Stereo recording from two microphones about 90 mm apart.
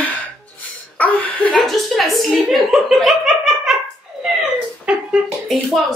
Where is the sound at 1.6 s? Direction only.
Centre (ahead or behind).